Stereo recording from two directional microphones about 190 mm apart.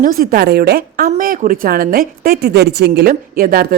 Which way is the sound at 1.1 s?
40° right (ahead or behind).